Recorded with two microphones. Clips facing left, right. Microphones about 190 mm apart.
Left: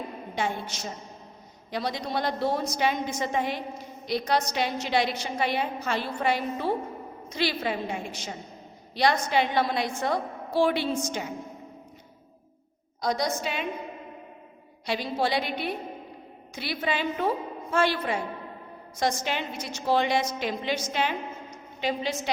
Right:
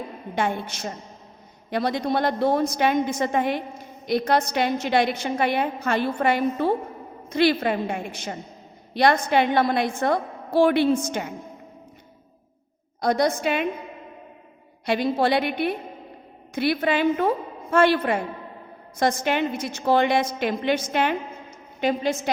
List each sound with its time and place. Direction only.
0.3 s a woman's voice: 55° right (ahead or behind)
13.0 s a woman's voice: 60° right (ahead or behind)
14.8 s a woman's voice: 55° right (ahead or behind)